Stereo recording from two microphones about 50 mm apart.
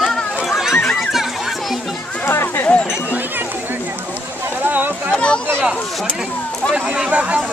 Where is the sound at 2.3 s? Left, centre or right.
Left.